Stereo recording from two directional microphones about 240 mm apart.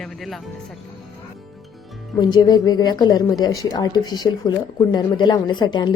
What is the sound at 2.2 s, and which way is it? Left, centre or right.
Speech, centre.